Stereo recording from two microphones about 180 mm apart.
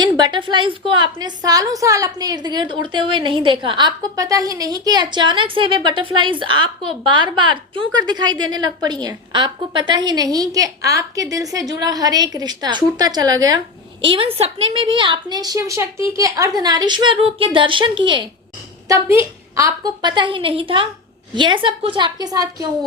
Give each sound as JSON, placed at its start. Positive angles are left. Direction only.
{"t": 0.2, "sound": "a woman's voice", "side_deg": -25}
{"t": 18.9, "sound": "a woman's voice", "side_deg": -15}